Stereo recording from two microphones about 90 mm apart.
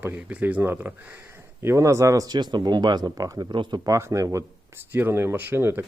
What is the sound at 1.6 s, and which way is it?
Speech, 35° right (ahead or behind).